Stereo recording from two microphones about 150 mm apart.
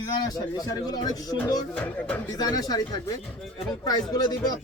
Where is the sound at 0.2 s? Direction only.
25° left (ahead or behind).